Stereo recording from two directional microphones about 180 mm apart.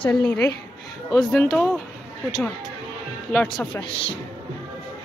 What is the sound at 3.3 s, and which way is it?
Speech, 10° left (ahead or behind).